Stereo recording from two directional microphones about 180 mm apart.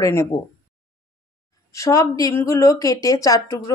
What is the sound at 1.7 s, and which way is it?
Speech, 15° left (ahead or behind).